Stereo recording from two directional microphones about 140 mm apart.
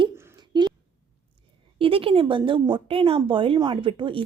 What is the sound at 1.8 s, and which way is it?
Speech, 40° right (ahead or behind).